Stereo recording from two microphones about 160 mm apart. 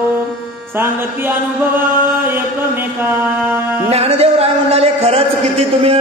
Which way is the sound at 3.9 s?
40° right (ahead or behind).